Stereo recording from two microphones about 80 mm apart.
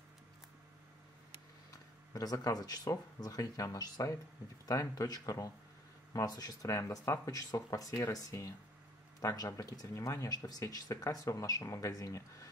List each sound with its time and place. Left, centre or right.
2.1 s speech: left
6.7 s speech: left